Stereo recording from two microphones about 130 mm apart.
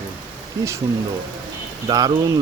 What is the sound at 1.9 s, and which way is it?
Speech, 30° right (ahead or behind).